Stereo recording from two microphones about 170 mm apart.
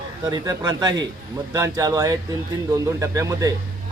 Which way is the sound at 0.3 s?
20° right (ahead or behind).